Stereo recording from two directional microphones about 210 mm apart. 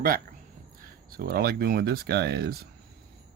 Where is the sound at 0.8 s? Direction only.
45° right (ahead or behind).